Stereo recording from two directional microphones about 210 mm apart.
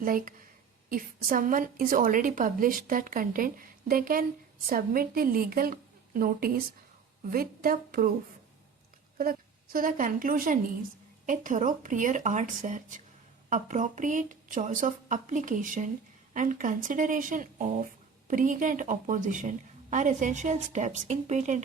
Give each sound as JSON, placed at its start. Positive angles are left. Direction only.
{"t": 0.0, "sound": "a woman's voice", "side_deg": -40}
{"t": 9.1, "sound": "a woman's voice", "side_deg": -40}